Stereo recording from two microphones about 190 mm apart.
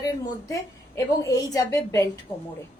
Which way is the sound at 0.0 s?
15° left (ahead or behind).